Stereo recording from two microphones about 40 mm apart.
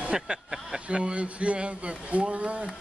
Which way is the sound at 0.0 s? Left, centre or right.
Right.